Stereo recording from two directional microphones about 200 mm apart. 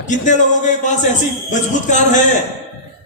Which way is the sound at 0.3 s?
35° left (ahead or behind).